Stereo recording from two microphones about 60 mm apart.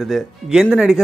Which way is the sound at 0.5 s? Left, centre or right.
Centre.